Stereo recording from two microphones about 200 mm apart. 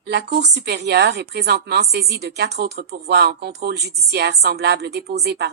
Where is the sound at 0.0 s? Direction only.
55° right (ahead or behind).